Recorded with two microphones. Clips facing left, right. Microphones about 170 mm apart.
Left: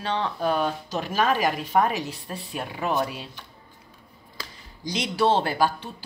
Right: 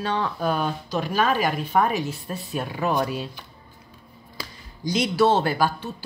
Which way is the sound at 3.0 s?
30° right (ahead or behind).